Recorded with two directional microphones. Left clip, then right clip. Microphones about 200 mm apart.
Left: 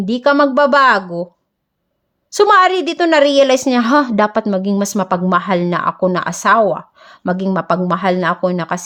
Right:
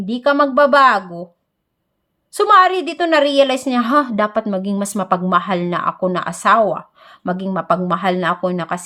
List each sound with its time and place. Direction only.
0.0 s speech: 35° left (ahead or behind)
2.3 s a woman's voice: 35° left (ahead or behind)